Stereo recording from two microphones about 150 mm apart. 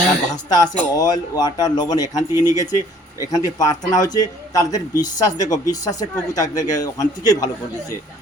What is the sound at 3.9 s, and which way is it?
A man's voice, 25° left (ahead or behind).